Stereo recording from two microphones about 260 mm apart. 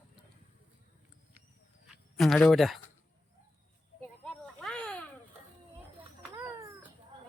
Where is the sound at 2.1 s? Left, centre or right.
Centre.